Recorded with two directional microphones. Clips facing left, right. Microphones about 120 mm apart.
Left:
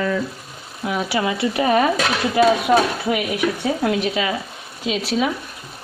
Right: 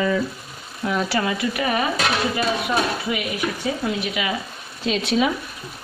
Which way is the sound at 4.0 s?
30° left (ahead or behind).